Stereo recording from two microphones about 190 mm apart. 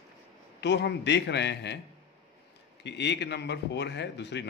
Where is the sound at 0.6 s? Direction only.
65° left (ahead or behind).